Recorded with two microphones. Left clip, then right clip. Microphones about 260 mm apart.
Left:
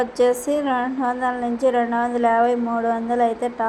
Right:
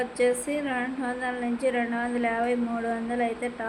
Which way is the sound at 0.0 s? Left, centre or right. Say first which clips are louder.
Left 6 dB; centre.